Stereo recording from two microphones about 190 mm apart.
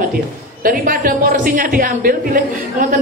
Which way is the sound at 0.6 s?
45° right (ahead or behind).